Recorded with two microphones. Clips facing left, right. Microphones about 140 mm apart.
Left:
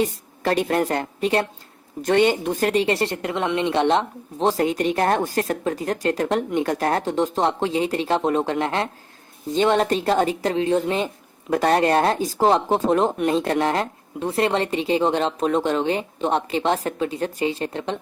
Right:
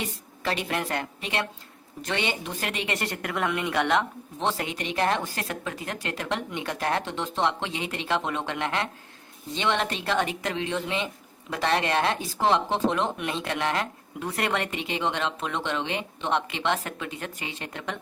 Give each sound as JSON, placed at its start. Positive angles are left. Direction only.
{"t": 0.0, "sound": "speech", "side_deg": 45}